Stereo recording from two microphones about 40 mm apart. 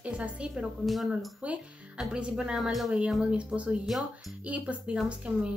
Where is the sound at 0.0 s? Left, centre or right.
Right.